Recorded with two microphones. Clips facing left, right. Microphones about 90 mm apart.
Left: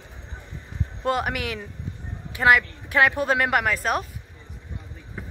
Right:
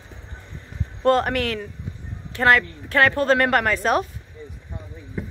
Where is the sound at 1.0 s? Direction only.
10° left (ahead or behind).